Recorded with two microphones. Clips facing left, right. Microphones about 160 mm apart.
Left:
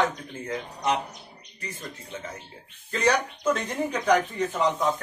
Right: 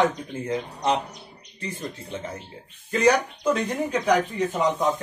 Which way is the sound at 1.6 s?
30° right (ahead or behind).